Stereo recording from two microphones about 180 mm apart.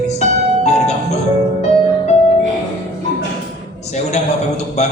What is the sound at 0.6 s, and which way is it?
Music, 40° left (ahead or behind).